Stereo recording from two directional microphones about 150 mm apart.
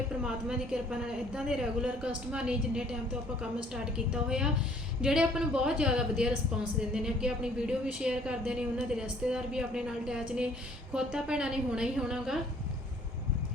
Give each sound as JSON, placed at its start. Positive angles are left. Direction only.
{"t": 0.2, "sound": "speech", "side_deg": -5}